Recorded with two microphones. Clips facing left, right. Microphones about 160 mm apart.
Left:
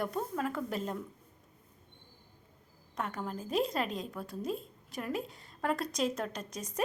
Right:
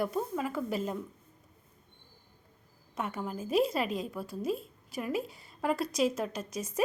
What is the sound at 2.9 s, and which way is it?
A woman's voice, 5° right (ahead or behind).